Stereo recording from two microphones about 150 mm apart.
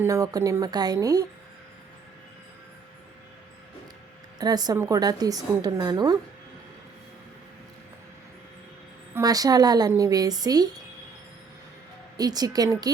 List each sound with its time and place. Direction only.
0.0 s a woman's voice: 20° right (ahead or behind)
4.4 s a woman's voice: 25° right (ahead or behind)
9.1 s a woman's voice: 25° right (ahead or behind)
12.1 s a woman's voice: 25° right (ahead or behind)